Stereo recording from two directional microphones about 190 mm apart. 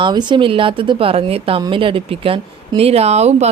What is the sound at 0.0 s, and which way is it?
A woman's voice, 25° right (ahead or behind).